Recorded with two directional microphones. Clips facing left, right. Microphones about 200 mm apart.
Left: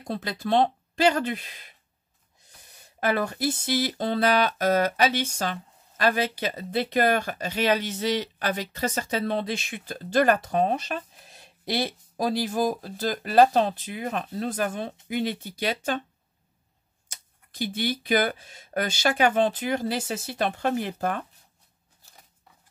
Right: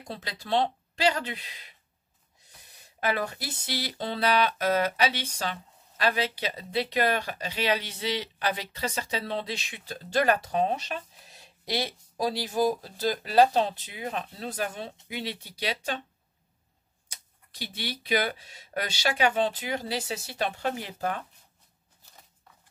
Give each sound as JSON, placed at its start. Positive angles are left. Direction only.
{"t": 0.1, "sound": "speech", "side_deg": 50}
{"t": 17.1, "sound": "speech", "side_deg": 50}